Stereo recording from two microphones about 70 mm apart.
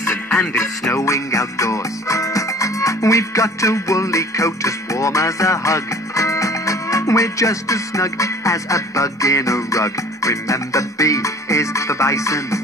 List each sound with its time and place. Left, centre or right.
0.3 s music: centre
0.9 s music: left